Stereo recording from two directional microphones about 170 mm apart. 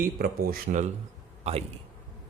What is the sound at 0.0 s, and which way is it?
Speech, 60° right (ahead or behind).